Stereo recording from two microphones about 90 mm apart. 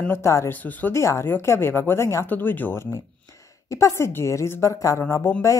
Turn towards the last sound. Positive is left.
turn(degrees=30)  # may be behind; listen again after turning